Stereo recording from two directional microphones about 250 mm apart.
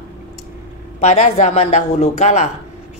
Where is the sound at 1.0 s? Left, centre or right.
Left.